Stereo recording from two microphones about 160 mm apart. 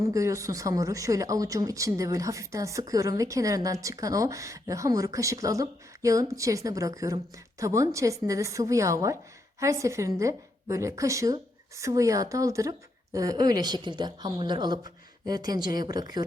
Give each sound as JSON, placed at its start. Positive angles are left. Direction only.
{"t": 0.1, "sound": "speech", "side_deg": -20}